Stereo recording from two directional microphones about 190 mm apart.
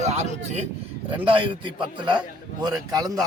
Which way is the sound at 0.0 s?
35° right (ahead or behind).